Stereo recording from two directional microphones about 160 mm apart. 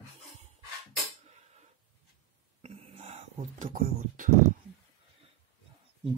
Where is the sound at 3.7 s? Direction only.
60° right (ahead or behind).